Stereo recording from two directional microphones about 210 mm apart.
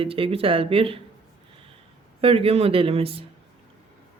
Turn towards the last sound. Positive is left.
turn(degrees=-25)  # may be behind; listen again after turning